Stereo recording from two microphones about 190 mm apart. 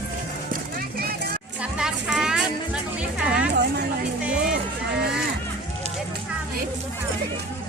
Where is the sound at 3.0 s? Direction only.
5° right (ahead or behind).